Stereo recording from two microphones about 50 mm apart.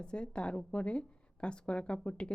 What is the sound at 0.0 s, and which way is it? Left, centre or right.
A woman's voice, centre.